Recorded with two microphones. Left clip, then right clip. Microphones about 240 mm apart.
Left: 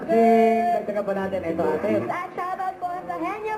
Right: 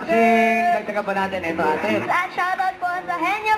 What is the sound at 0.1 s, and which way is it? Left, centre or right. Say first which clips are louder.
Speech: right 1 dB; centre.